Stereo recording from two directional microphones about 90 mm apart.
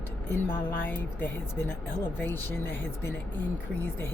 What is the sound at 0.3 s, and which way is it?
Speech, 25° left (ahead or behind).